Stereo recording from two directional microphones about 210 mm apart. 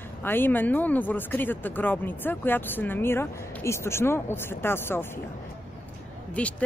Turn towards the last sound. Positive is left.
turn(degrees=5)  # may be behind; listen again after turning